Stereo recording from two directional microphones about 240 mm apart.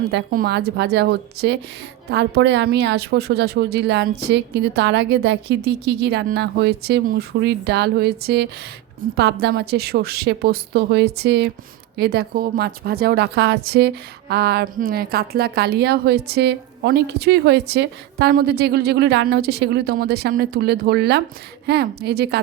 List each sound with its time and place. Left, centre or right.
0.1 s a woman's voice: right